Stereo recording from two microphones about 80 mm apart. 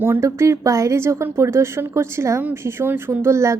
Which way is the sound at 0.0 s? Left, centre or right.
Right.